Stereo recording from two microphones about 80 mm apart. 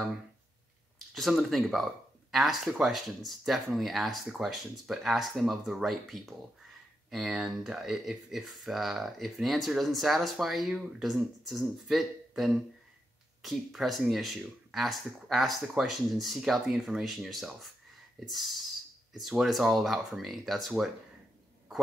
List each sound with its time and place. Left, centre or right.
1.1 s speech: centre